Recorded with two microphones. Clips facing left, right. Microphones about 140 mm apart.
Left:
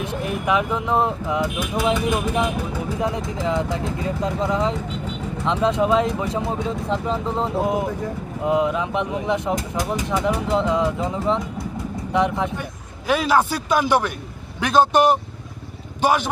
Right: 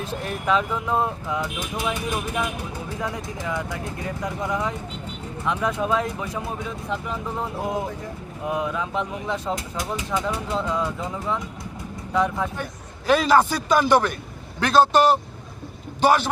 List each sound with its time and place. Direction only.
0.0 s speech: 15° left (ahead or behind)
13.1 s a man's voice: 10° left (ahead or behind)